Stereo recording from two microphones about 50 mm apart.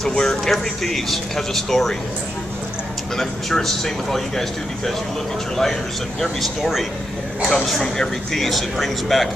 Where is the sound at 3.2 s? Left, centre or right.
Centre.